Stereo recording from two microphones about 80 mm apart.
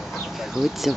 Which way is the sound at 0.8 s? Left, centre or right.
Centre.